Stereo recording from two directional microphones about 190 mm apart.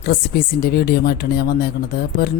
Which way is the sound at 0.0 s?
50° left (ahead or behind).